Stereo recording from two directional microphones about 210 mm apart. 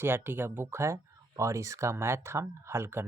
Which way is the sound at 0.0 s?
10° right (ahead or behind).